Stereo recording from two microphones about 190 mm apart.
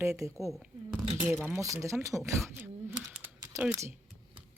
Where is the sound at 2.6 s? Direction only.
10° right (ahead or behind).